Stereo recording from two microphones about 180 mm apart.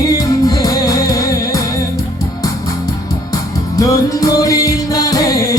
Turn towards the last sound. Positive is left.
turn(degrees=20)  # may be behind; listen again after turning